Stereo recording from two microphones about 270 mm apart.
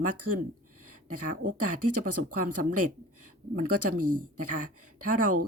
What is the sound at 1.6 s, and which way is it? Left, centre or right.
Speech, right.